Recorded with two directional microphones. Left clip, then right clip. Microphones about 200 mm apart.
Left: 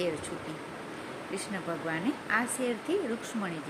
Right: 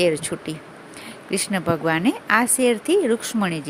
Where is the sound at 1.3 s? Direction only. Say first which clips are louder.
Right 14 dB; 55° right (ahead or behind).